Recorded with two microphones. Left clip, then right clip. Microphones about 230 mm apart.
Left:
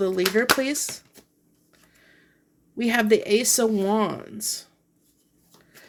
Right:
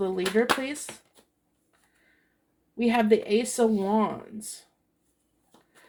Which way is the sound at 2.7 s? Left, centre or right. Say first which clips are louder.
Left 2 dB; left.